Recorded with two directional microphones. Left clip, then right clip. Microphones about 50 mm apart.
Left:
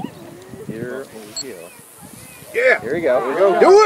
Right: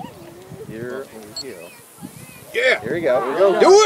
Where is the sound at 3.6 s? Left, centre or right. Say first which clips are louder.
Left 1 dB; centre.